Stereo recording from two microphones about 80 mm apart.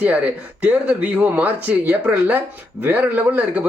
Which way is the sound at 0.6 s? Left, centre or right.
Centre.